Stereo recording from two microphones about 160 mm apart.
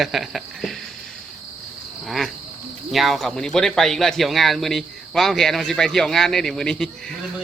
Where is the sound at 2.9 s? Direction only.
Centre (ahead or behind).